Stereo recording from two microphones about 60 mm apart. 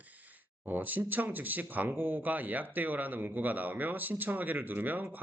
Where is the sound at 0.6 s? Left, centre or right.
Right.